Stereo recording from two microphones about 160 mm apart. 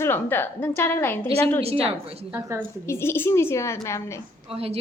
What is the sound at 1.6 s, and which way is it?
Speech, 40° right (ahead or behind).